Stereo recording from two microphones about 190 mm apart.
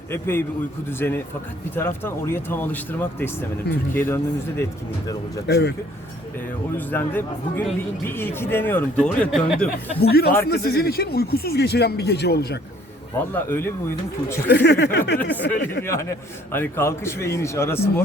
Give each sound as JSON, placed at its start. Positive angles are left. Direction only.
{"t": 0.1, "sound": "a man's voice", "side_deg": 10}
{"t": 5.5, "sound": "speech", "side_deg": 60}
{"t": 6.7, "sound": "a man's voice", "side_deg": 10}
{"t": 10.0, "sound": "speech", "side_deg": 55}
{"t": 13.3, "sound": "a man's voice", "side_deg": 10}
{"t": 14.5, "sound": "speech", "side_deg": 60}
{"t": 15.8, "sound": "a man's voice", "side_deg": 15}